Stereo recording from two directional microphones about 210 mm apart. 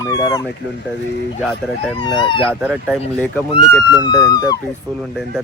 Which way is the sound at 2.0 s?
20° left (ahead or behind).